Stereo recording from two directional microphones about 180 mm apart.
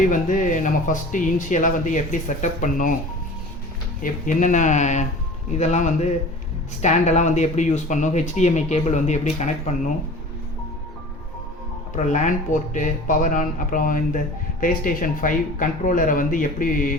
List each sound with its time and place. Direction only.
0.0 s speech: 45° left (ahead or behind)
4.0 s speech: 45° left (ahead or behind)
11.9 s speech: 45° left (ahead or behind)